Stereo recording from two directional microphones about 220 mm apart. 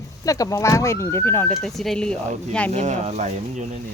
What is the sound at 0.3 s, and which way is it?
Speech, 15° left (ahead or behind).